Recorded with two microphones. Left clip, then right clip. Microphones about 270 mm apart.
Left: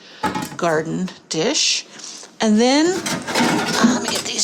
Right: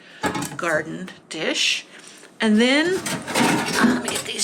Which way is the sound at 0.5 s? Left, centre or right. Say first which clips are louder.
Left 4 dB; centre.